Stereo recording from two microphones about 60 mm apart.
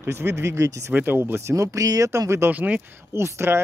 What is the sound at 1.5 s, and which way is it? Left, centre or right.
Speech, right.